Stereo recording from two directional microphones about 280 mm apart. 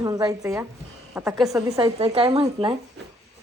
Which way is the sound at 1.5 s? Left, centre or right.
Centre.